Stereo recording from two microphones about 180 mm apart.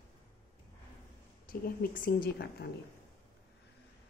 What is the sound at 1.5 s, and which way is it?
A woman's voice, 50° left (ahead or behind).